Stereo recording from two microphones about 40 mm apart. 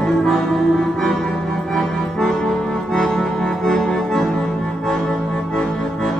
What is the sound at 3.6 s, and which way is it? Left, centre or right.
Music, centre.